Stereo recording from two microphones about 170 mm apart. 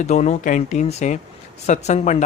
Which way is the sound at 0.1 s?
40° left (ahead or behind).